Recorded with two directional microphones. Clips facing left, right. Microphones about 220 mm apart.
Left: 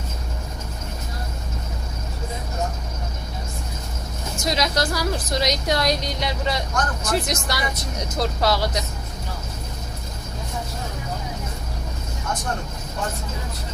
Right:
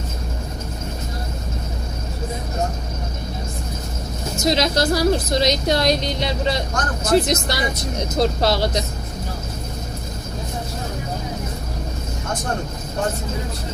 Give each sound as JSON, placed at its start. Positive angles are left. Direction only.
{"t": 4.4, "sound": "a woman's voice", "side_deg": -25}